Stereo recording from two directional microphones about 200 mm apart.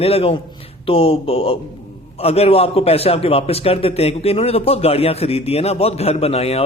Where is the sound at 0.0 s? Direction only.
30° left (ahead or behind).